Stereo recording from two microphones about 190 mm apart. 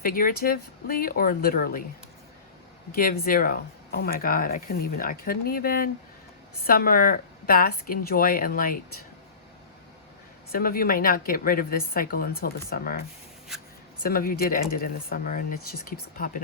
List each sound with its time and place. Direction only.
0.0 s speech: 50° left (ahead or behind)
2.9 s speech: 50° left (ahead or behind)
10.5 s speech: 50° left (ahead or behind)
14.0 s speech: 50° left (ahead or behind)